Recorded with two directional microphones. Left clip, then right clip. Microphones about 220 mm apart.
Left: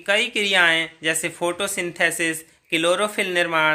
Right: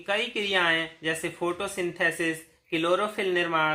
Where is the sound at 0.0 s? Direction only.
45° left (ahead or behind).